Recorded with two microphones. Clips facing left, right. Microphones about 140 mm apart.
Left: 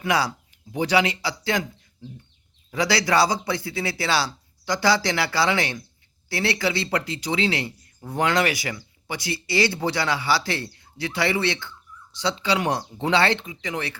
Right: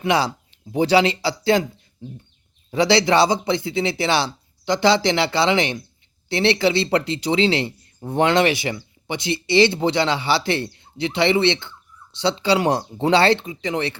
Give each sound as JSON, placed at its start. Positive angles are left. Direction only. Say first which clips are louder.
{"t": 0.0, "sound": "speech", "louder": "right 3 dB", "side_deg": -25}